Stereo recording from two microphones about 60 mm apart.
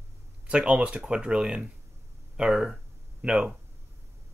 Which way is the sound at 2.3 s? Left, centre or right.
Centre.